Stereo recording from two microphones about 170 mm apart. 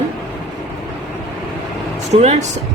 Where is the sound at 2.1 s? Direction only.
40° right (ahead or behind).